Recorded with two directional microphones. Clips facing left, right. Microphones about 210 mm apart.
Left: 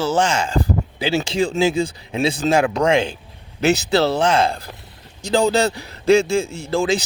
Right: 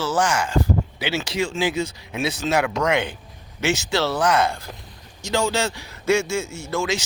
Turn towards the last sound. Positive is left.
turn(degrees=30)  # may be behind; listen again after turning